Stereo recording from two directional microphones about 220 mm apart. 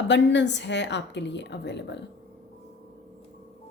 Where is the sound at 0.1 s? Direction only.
55° left (ahead or behind).